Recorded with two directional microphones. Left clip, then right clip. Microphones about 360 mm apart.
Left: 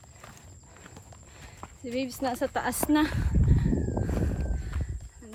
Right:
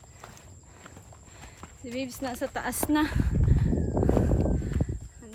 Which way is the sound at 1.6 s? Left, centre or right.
Centre.